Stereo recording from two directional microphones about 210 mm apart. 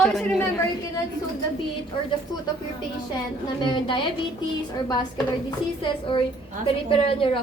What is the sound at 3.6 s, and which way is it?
Speech, 20° left (ahead or behind).